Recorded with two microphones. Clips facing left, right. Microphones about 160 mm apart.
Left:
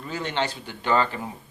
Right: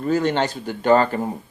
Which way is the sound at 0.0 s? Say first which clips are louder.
Right 8 dB; 45° right (ahead or behind).